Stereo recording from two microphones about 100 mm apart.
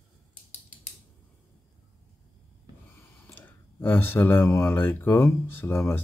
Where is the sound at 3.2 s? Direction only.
15° left (ahead or behind).